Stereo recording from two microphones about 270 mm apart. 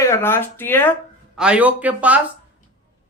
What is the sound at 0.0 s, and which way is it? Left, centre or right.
Speech, centre.